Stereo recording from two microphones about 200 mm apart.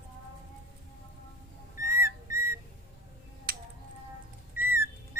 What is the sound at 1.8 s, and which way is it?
Whistle, 15° right (ahead or behind).